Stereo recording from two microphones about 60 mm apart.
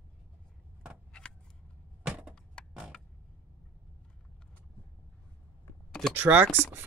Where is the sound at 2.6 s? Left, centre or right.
Centre.